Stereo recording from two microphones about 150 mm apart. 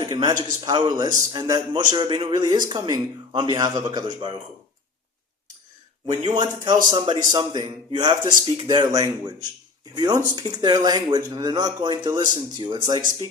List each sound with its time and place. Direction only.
0.2 s speech: 30° right (ahead or behind)
6.1 s speech: 30° right (ahead or behind)